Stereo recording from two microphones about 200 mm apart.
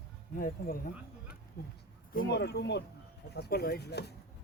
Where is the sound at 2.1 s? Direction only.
55° left (ahead or behind).